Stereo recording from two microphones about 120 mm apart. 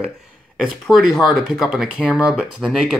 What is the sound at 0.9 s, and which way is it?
Speech, centre (ahead or behind).